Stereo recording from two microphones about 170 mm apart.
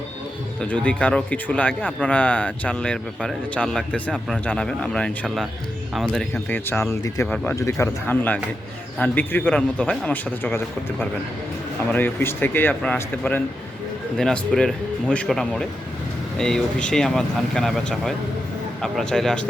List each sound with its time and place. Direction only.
0.6 s speech: 10° left (ahead or behind)
6.3 s speech: 15° left (ahead or behind)
7.3 s speech: 5° left (ahead or behind)
7.5 s speech: 15° left (ahead or behind)
11.9 s speech: 10° left (ahead or behind)